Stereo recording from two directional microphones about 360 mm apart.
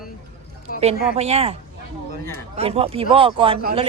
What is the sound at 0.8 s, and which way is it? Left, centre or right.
Speech, centre.